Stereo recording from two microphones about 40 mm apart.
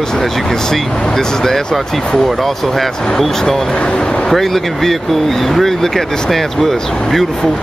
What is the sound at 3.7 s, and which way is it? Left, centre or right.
Speech, left.